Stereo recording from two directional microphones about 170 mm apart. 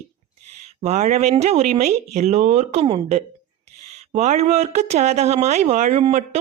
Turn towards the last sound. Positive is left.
turn(degrees=-40)  # may be behind; listen again after turning